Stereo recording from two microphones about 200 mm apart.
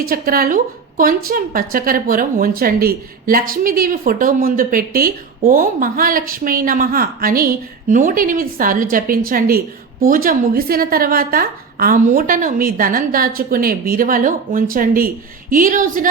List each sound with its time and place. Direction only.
0.0 s a woman's voice: 45° right (ahead or behind)